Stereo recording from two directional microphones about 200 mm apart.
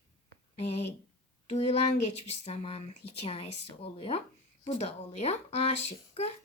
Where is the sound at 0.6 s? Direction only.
30° left (ahead or behind).